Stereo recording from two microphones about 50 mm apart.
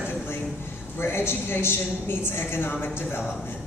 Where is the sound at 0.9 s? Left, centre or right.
Left.